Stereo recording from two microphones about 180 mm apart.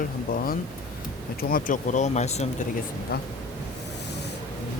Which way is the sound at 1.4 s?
50° left (ahead or behind).